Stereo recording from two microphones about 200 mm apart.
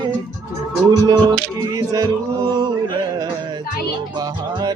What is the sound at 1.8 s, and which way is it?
Speech, 20° right (ahead or behind).